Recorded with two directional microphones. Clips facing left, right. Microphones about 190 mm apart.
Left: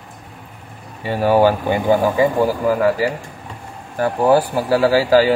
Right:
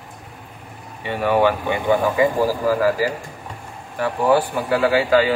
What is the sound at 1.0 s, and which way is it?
Speech, 35° left (ahead or behind).